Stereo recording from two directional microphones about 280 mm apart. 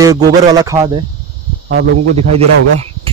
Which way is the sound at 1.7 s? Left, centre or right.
Right.